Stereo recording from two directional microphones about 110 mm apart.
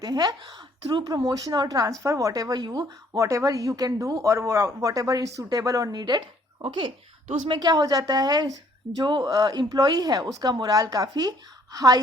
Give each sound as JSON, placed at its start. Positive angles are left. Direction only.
{"t": 0.0, "sound": "a woman's voice", "side_deg": -35}
{"t": 3.1, "sound": "speech", "side_deg": -30}